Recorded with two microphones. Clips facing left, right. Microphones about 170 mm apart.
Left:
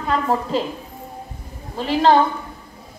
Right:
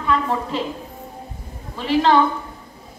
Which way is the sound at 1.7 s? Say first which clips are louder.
Left 1 dB; 35° left (ahead or behind).